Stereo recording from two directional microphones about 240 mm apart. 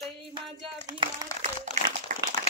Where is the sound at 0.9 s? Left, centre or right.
Centre.